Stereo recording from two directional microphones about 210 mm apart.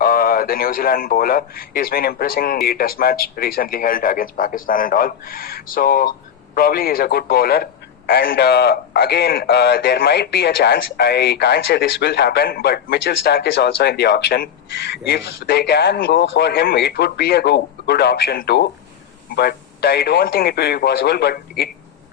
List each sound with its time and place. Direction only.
0.0 s a man's voice: 45° left (ahead or behind)